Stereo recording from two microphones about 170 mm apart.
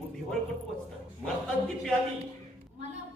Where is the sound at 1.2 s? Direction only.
5° left (ahead or behind).